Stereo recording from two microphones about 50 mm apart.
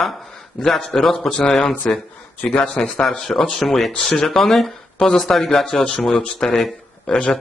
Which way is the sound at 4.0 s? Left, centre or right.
Centre.